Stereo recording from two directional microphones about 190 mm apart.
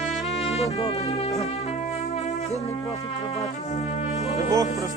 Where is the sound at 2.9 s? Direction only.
35° left (ahead or behind).